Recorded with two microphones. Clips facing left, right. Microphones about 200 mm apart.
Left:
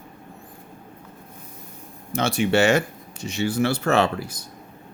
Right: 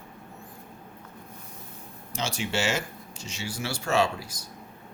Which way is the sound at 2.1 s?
60° left (ahead or behind).